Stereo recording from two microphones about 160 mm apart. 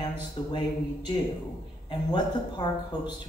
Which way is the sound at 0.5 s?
30° left (ahead or behind).